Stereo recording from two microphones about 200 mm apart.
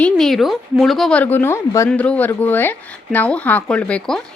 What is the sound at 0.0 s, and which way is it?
Speech, centre (ahead or behind).